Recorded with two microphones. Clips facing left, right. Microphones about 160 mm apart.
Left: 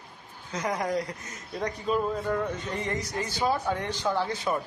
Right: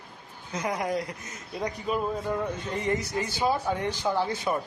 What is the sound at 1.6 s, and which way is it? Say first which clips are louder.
Speech: left 1 dB; 10° right (ahead or behind).